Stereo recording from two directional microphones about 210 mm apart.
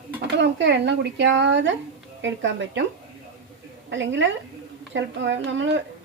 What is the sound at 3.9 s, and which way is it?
A woman's voice, 60° right (ahead or behind).